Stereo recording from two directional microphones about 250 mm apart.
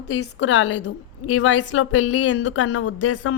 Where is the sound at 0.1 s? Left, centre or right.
Left.